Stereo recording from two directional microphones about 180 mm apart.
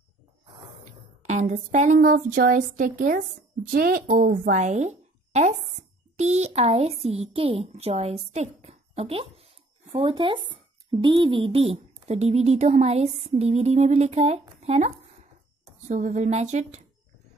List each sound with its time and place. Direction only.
1.2 s a woman's voice: 40° right (ahead or behind)
14.6 s a sound: 35° right (ahead or behind)
15.9 s speech: 40° right (ahead or behind)